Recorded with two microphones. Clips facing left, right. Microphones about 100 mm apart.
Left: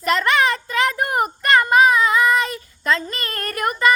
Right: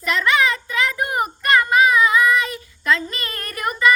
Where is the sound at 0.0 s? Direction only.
45° left (ahead or behind).